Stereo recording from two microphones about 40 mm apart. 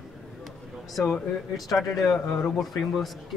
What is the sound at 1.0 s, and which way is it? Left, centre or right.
Speech, left.